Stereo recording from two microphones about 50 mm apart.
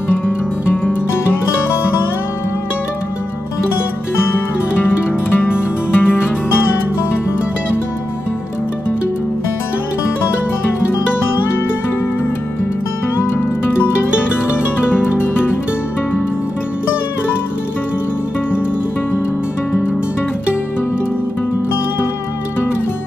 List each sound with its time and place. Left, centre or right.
5.3 s music: left
13.2 s music: left